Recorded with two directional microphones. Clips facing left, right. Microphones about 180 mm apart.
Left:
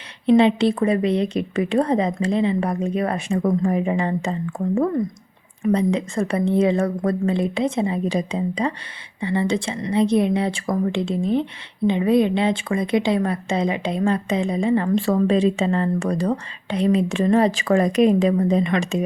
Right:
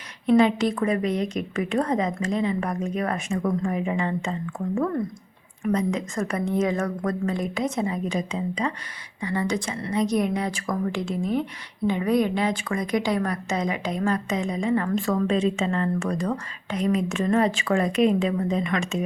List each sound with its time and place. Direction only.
0.3 s a woman's voice: 30° left (ahead or behind)